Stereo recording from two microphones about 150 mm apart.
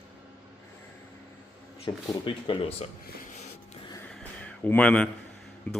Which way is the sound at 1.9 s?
25° left (ahead or behind).